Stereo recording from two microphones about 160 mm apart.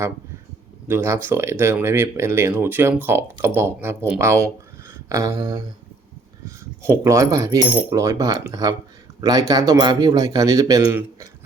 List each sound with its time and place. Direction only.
0.9 s speech: 15° right (ahead or behind)